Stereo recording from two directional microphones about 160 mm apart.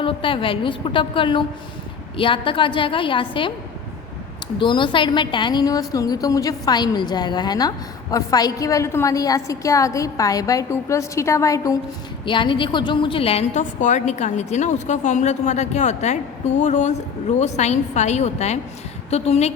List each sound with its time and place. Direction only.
0.0 s a woman's voice: 30° left (ahead or behind)
4.6 s a woman's voice: 30° left (ahead or behind)
12.2 s a woman's voice: 30° left (ahead or behind)